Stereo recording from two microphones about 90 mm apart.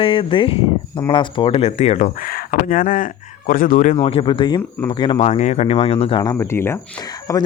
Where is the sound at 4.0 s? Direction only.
80° left; by 5.2 s 65° left (ahead or behind).